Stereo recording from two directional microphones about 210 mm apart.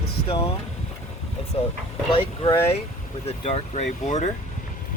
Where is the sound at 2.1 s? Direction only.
25° left (ahead or behind).